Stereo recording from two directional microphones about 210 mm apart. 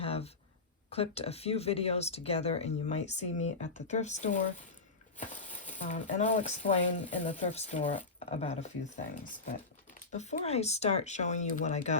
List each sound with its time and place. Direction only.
0.0 s a sound: 30° left (ahead or behind)
0.9 s speech: 30° left (ahead or behind)
10.1 s speech: 35° left (ahead or behind)